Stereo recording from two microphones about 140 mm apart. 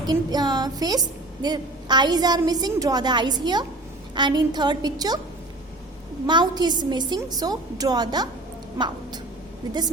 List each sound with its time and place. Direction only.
0.1 s a woman's voice: 30° right (ahead or behind)
6.2 s a woman's voice: 30° right (ahead or behind)